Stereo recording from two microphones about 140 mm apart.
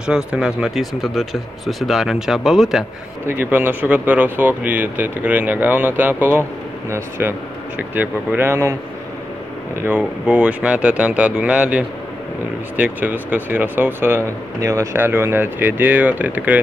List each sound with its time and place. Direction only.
0.0 s speech: 5° right (ahead or behind)
3.3 s speech: 15° right (ahead or behind)
9.8 s speech: 15° right (ahead or behind)